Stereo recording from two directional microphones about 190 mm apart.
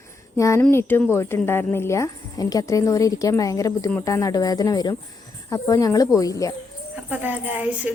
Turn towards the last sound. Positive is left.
turn(degrees=-10)  # may be behind; listen again after turning